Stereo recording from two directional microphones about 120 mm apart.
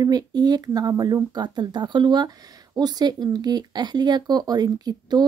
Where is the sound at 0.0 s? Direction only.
35° right (ahead or behind).